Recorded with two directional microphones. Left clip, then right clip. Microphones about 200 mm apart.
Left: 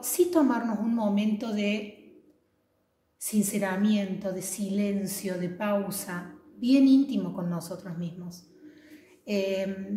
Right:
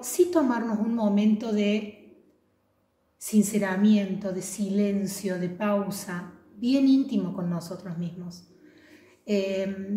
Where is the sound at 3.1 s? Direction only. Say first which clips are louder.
Right 4 dB; 10° left (ahead or behind).